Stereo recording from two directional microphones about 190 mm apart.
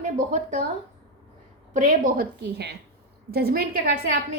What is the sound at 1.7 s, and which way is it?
A woman's voice, 45° right (ahead or behind).